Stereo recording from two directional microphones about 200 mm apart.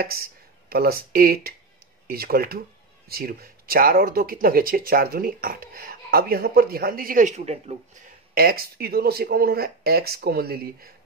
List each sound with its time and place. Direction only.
0.0 s speech: 50° right (ahead or behind); by 7.7 s 35° right (ahead or behind)
8.4 s speech: 50° right (ahead or behind)